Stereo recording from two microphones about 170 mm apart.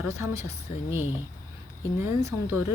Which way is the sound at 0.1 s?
15° right (ahead or behind).